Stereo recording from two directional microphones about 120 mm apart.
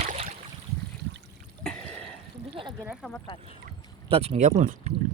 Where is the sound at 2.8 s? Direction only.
5° right (ahead or behind).